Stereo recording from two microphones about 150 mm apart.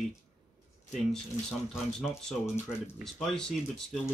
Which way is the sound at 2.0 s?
5° left (ahead or behind).